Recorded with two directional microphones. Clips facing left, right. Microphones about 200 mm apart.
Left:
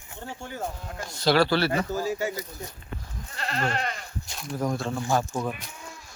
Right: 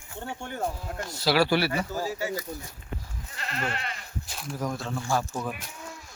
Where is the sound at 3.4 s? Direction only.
40° left (ahead or behind).